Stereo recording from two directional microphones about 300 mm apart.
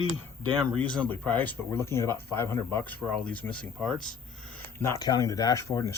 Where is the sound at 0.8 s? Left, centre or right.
Centre.